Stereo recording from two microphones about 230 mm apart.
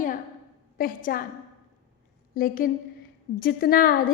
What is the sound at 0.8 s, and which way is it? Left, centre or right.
Speech, left.